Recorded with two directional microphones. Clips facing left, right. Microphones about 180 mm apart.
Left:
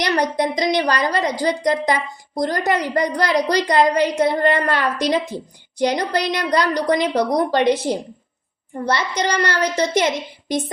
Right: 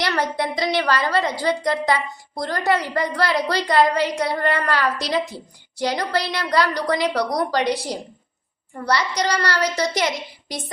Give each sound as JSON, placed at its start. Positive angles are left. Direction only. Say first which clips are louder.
{"t": 0.2, "sound": "a woman's voice", "louder": "left 3 dB", "side_deg": 15}